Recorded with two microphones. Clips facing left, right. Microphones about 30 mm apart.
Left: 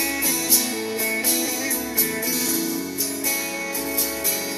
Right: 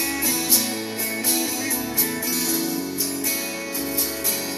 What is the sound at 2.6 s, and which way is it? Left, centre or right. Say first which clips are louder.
Music: even; centre.